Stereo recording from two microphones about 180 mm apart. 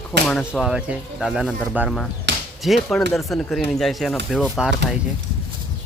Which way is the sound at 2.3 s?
75° right (ahead or behind).